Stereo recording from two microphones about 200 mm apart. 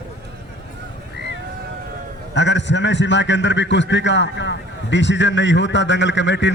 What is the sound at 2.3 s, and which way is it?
A man's voice, 65° left (ahead or behind).